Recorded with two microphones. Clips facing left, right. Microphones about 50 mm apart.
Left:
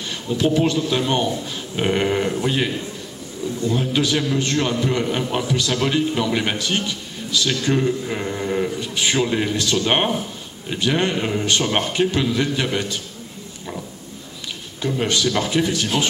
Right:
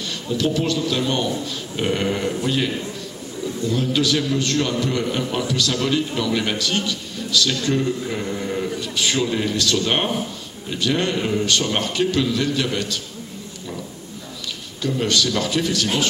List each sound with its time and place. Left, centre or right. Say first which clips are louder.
0.3 s a man's voice: left 3 dB; left
8.8 s a man's voice: left 1 dB; left
14.8 s a man's voice: even; left